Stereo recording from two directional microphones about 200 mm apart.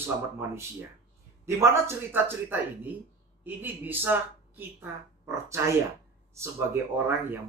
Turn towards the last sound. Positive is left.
turn(degrees=-10)  # may be behind; listen again after turning